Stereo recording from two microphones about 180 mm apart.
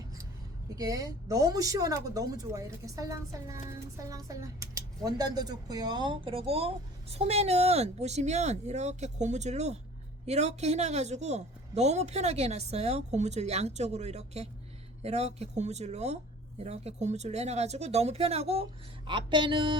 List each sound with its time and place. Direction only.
0.8 s speech: 20° right (ahead or behind)